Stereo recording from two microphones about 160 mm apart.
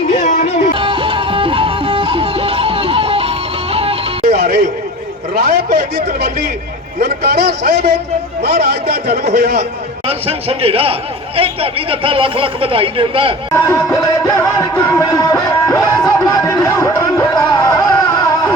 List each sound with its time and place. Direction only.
0.1 s music: 45° left (ahead or behind)
0.7 s music: 35° right (ahead or behind)
4.3 s music: 70° right (ahead or behind)
5.3 s a sound: 70° right (ahead or behind)
7.0 s a man's voice: 75° right (ahead or behind)
10.1 s a man's voice: 35° right (ahead or behind)
13.5 s music: 20° left (ahead or behind)